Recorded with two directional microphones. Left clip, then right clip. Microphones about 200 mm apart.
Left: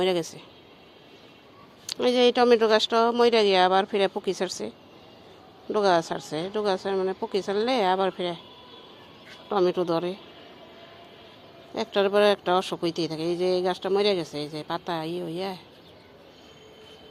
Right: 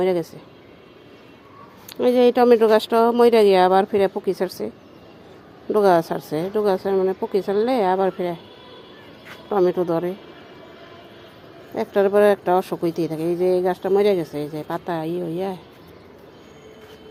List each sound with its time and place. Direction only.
0.0 s speech: 5° right (ahead or behind)
1.9 s speech: 5° right (ahead or behind)
5.7 s speech: 20° right (ahead or behind)
9.5 s speech: 5° right (ahead or behind)
11.7 s speech: 5° right (ahead or behind)